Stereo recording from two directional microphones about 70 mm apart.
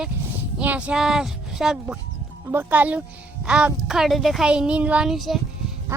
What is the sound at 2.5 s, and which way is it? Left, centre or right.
Speech, right.